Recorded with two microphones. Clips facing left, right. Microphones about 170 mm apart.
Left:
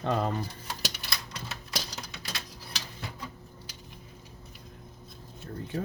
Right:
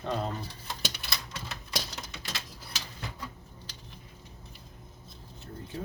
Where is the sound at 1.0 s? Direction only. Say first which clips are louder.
Even; centre (ahead or behind).